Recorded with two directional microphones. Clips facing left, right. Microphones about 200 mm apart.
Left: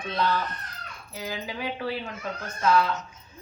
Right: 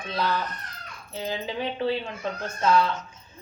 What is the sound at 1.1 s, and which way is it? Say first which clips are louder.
A woman's voice: right 4 dB; 25° right (ahead or behind).